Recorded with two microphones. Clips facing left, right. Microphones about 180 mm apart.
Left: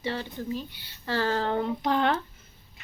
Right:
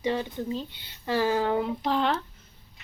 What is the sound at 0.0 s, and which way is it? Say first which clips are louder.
A woman's voice: right 4 dB; 15° right (ahead or behind).